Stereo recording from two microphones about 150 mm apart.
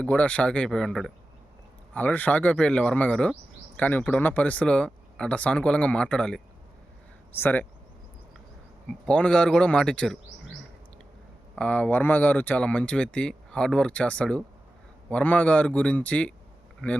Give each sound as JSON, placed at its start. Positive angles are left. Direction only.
{"t": 0.0, "sound": "speech", "side_deg": 10}
{"t": 8.9, "sound": "speech", "side_deg": 10}
{"t": 11.5, "sound": "speech", "side_deg": 10}